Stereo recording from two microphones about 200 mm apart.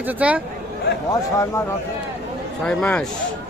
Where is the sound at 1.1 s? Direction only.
15° left (ahead or behind).